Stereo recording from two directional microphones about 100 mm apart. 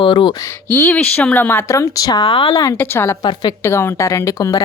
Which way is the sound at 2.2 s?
55° left (ahead or behind).